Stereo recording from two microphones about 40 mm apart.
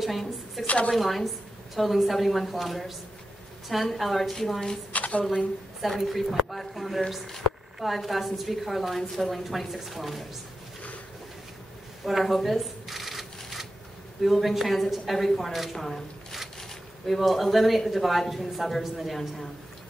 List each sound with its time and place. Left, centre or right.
0.0 s a woman's voice: centre
0.7 s a woman's voice: left
0.9 s a woman's voice: centre
4.9 s a woman's voice: left
5.8 s a woman's voice: centre
12.0 s shuffling cards: centre
14.2 s a woman's voice: centre